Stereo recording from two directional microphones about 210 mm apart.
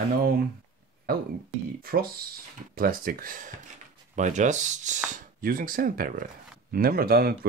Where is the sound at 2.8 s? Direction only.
45° right (ahead or behind).